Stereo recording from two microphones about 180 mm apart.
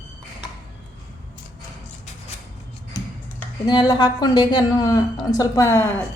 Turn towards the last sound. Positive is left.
turn(degrees=10)  # may be behind; listen again after turning